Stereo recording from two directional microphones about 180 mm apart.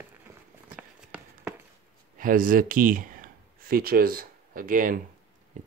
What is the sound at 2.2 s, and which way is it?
Speech, 50° right (ahead or behind).